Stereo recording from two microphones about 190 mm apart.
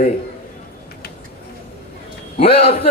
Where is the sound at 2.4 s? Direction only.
30° left (ahead or behind).